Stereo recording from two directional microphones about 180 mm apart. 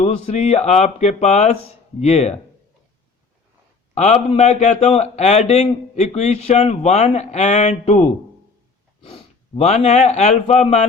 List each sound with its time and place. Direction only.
0.0 s a man's voice: 35° left (ahead or behind)
3.9 s a man's voice: 35° left (ahead or behind)